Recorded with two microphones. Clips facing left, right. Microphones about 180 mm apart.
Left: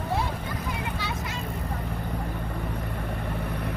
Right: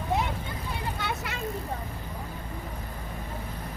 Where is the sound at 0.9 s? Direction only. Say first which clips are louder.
Left 1 dB; 55° right (ahead or behind).